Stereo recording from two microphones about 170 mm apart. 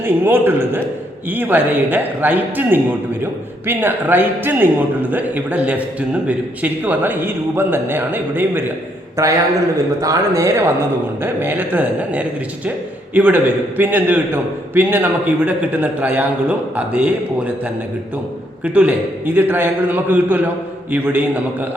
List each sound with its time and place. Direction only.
0.0 s speech: 15° right (ahead or behind)
10.0 s speech: 20° right (ahead or behind)
18.6 s speech: 10° right (ahead or behind)